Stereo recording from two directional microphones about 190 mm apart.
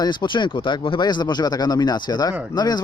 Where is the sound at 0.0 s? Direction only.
25° left (ahead or behind).